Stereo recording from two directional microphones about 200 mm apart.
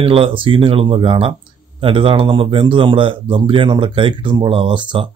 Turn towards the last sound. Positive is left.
turn(degrees=-25)  # may be behind; listen again after turning